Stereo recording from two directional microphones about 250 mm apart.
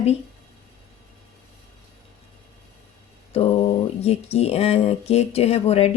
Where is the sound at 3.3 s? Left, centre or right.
Left.